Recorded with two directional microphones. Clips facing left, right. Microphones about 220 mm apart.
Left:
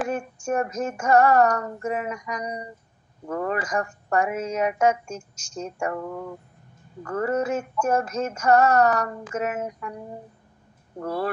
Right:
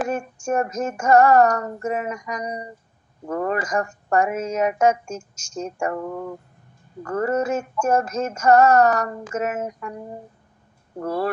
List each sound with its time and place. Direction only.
0.0 s female singing: 45° right (ahead or behind)
7.1 s female singing: 45° right (ahead or behind)
11.0 s speech: 40° right (ahead or behind)